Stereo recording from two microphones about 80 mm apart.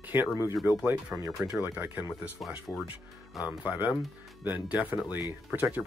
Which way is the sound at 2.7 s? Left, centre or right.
Left.